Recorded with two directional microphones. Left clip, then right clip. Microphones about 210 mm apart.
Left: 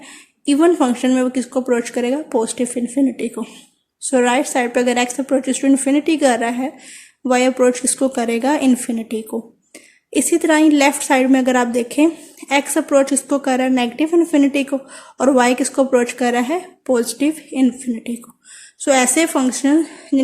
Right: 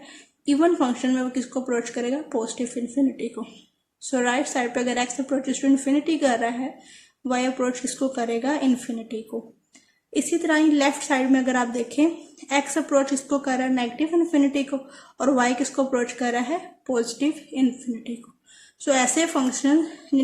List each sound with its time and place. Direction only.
0.4 s a woman's voice: 40° left (ahead or behind)